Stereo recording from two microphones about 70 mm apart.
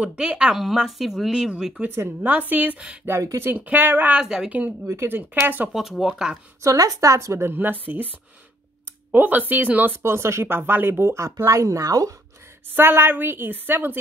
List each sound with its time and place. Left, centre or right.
0.0 s speech: centre
0.6 s speech: centre
1.9 s speech: right
2.3 s speech: right
4.2 s speech: centre
4.5 s speech: right
4.8 s speech: right
5.7 s speech: centre
6.6 s speech: right
9.1 s speech: right
10.0 s speech: right
12.7 s speech: right